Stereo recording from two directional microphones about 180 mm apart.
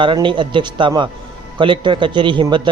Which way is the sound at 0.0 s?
25° right (ahead or behind).